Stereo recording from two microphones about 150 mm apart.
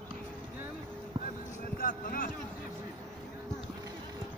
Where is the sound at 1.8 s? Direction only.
70° left (ahead or behind).